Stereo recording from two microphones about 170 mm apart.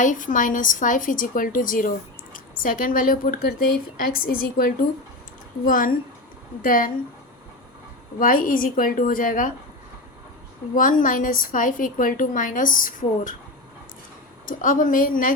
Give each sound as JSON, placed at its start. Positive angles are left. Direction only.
{"t": 0.0, "sound": "a woman's voice", "side_deg": 50}
{"t": 8.2, "sound": "a woman's voice", "side_deg": 55}
{"t": 10.8, "sound": "a woman's voice", "side_deg": 50}
{"t": 14.4, "sound": "a woman's voice", "side_deg": 50}